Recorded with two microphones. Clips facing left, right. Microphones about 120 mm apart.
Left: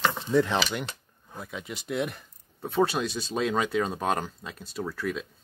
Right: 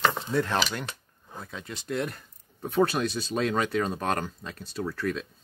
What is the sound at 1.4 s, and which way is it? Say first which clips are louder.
Speech: left 2 dB; 10° left (ahead or behind).